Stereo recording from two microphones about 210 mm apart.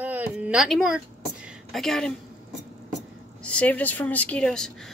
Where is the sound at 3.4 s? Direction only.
5° left (ahead or behind).